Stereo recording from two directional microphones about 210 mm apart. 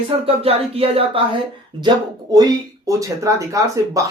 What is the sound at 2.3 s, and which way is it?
Speech, 15° right (ahead or behind).